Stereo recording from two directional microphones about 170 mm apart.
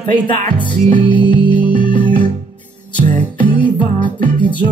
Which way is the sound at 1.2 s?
25° left (ahead or behind).